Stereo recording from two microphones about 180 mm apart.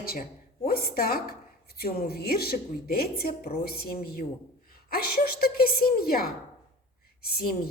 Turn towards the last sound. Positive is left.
turn(degrees=60)  # may be behind; listen again after turning